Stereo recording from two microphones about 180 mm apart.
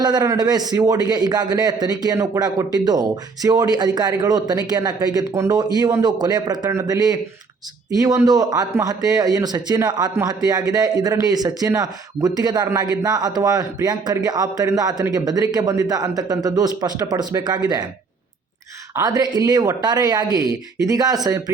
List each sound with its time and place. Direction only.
0.0 s speech: 20° right (ahead or behind)
18.9 s speech: 20° right (ahead or behind)